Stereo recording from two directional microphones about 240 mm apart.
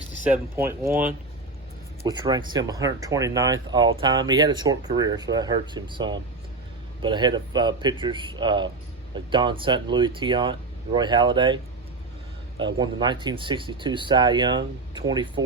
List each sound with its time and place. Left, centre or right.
0.5 s speech: centre
2.0 s speech: centre